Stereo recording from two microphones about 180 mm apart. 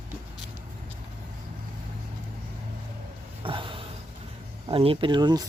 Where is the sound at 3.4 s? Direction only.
30° right (ahead or behind).